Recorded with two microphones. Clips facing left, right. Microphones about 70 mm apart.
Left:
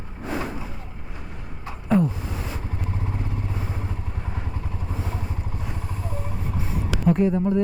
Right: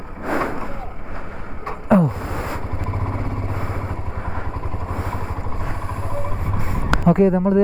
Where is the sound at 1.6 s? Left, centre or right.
Right.